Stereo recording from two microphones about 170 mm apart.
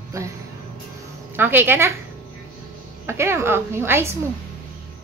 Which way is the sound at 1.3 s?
10° right (ahead or behind).